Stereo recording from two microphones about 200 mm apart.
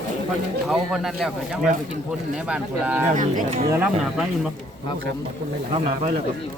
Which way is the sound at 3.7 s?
10° right (ahead or behind).